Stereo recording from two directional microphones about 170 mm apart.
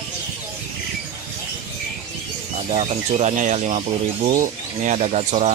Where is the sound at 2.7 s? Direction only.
45° right (ahead or behind).